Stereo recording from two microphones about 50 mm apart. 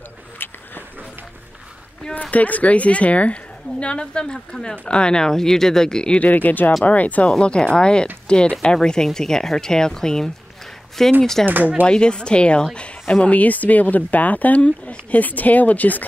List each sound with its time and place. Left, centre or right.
2.3 s speech: left; by 6.1 s centre
6.1 s speech: left
7.2 s speech: centre
11.4 s speech: right
11.8 s speech: centre